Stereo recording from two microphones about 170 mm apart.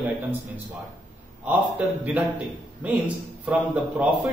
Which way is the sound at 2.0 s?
10° right (ahead or behind).